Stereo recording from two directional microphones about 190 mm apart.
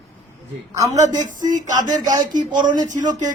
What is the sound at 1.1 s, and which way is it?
Music, 40° right (ahead or behind).